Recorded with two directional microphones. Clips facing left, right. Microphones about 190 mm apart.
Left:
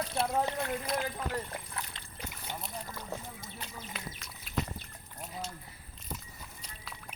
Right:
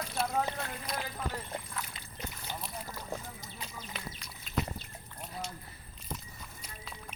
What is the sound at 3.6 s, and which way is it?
Duck, centre (ahead or behind).